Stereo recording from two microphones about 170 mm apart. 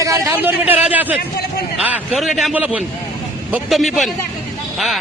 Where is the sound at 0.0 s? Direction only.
15° right (ahead or behind).